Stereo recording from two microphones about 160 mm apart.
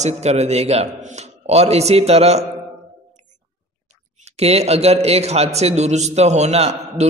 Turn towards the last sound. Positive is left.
turn(degrees=-40)  # may be behind; listen again after turning